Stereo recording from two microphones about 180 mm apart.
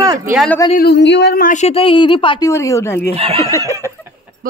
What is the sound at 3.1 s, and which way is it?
Speech, 35° right (ahead or behind).